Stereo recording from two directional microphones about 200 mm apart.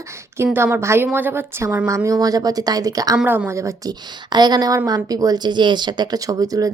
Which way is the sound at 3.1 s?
10° right (ahead or behind).